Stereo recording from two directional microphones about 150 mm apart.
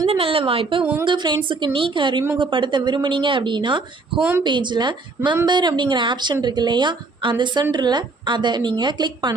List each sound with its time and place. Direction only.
0.1 s a woman's voice: 40° right (ahead or behind)
4.2 s a woman's voice: 10° right (ahead or behind)
4.4 s a woman's voice: 30° right (ahead or behind)